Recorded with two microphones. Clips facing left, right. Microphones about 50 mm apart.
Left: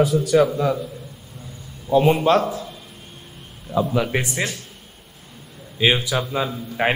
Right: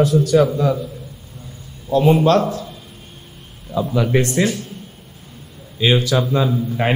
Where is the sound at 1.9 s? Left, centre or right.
Centre.